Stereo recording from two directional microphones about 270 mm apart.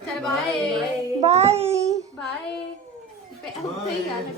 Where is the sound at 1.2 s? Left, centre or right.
Right.